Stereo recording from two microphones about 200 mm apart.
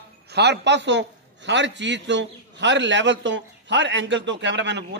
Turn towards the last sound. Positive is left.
turn(degrees=-60)  # may be behind; listen again after turning